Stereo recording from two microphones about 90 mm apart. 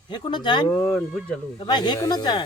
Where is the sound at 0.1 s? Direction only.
55° left (ahead or behind).